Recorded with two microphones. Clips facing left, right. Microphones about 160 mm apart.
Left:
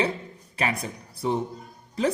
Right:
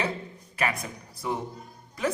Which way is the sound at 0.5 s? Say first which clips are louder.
Left 1 dB; 30° left (ahead or behind).